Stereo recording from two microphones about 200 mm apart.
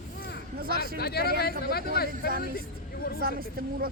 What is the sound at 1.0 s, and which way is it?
Speech, 50° left (ahead or behind).